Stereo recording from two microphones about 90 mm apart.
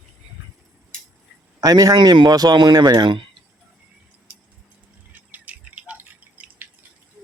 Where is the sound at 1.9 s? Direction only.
60° right (ahead or behind).